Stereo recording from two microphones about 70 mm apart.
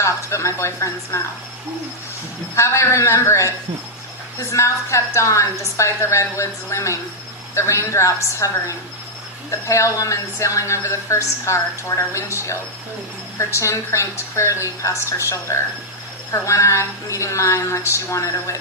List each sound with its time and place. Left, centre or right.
0.0 s a woman's voice: left
2.6 s a woman's voice: left